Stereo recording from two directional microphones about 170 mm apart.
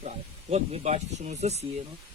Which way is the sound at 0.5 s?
40° right (ahead or behind).